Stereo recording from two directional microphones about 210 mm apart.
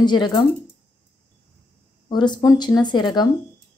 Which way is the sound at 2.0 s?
20° left (ahead or behind).